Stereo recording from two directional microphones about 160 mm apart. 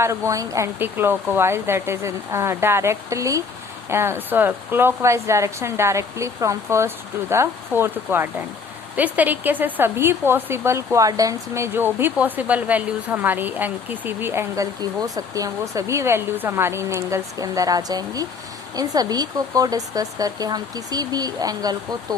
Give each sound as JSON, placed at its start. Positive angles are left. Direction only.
{"t": 0.0, "sound": "speech", "side_deg": -20}